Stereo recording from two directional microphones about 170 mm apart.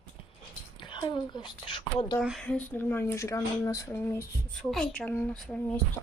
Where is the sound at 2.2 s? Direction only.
Centre (ahead or behind).